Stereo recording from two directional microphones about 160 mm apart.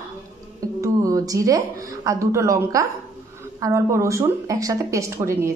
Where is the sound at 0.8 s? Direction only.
20° right (ahead or behind).